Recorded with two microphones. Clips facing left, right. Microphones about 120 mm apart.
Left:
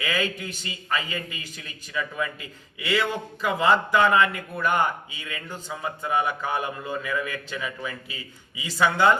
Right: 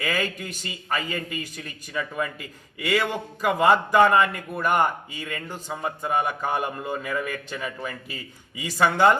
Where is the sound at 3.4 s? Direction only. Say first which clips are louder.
Right 2 dB; 50° right (ahead or behind).